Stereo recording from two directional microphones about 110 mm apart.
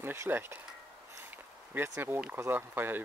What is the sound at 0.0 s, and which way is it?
Speech, 20° right (ahead or behind).